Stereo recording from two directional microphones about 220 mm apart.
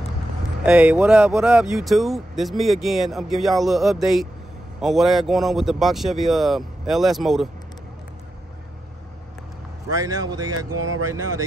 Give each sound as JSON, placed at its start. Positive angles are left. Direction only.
{"t": 0.7, "sound": "speech", "side_deg": -5}
{"t": 9.8, "sound": "speech", "side_deg": -15}
{"t": 10.8, "sound": "speech", "side_deg": -75}